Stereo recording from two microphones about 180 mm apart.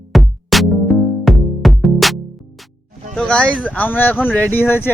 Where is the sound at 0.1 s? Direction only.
Centre (ahead or behind).